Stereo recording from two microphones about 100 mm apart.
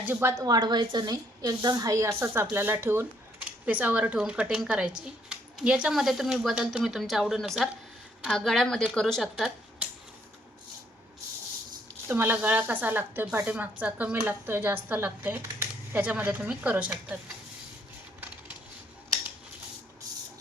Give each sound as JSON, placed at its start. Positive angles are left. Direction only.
{"t": 0.0, "sound": "speech", "side_deg": -20}
{"t": 0.4, "sound": "a woman's voice", "side_deg": -45}
{"t": 9.3, "sound": "a sound", "side_deg": -10}
{"t": 12.0, "sound": "speech", "side_deg": -20}